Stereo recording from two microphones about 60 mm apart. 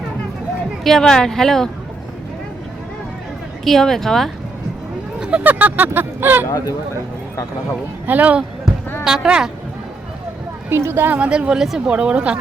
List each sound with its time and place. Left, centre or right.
0.9 s speech: centre
3.6 s speech: centre
5.4 s speech: right
8.0 s speech: right
9.0 s speech: centre
10.7 s speech: right
11.2 s speech: centre